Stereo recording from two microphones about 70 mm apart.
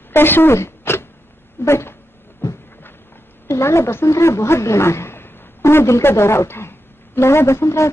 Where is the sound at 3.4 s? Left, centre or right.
Left.